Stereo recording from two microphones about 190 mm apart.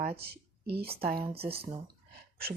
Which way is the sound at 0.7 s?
55° right (ahead or behind).